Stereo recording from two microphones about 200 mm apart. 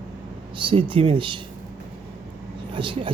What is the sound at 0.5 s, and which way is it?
Speech, 25° right (ahead or behind).